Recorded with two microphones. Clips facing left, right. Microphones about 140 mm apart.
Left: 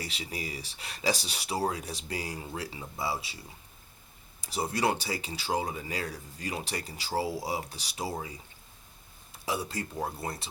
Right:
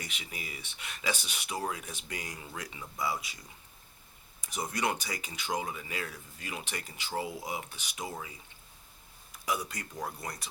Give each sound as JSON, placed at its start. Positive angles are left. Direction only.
{"t": 0.0, "sound": "speech", "side_deg": 35}
{"t": 4.4, "sound": "speech", "side_deg": 30}